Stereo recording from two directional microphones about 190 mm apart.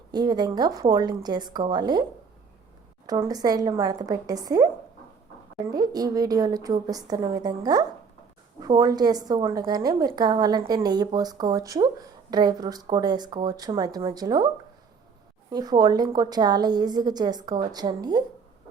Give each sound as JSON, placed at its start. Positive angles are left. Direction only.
{"t": 0.1, "sound": "speech", "side_deg": -20}
{"t": 3.1, "sound": "speech", "side_deg": -20}
{"t": 5.7, "sound": "speech", "side_deg": -20}